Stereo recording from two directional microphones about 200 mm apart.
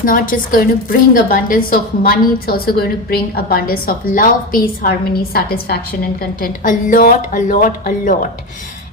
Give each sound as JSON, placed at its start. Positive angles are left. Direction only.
{"t": 0.0, "sound": "a woman's voice", "side_deg": 45}